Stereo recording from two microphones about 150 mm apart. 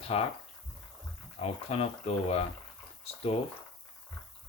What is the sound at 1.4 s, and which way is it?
Speech, 45° left (ahead or behind).